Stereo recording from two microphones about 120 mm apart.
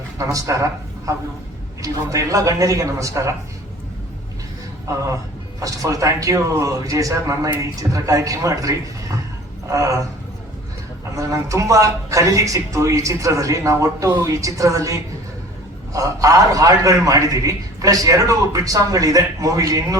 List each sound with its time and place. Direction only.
0.2 s a man's voice: 25° right (ahead or behind)
4.9 s a man's voice: 25° right (ahead or behind)
9.7 s a man's voice: 25° right (ahead or behind)
11.2 s a man's voice: 25° right (ahead or behind)